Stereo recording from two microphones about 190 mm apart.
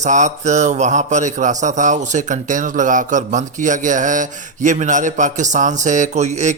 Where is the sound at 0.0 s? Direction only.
40° right (ahead or behind).